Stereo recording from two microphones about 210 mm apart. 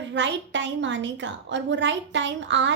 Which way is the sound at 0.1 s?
60° right (ahead or behind).